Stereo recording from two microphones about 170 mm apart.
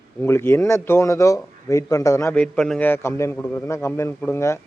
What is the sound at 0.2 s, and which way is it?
A man's voice, 15° left (ahead or behind).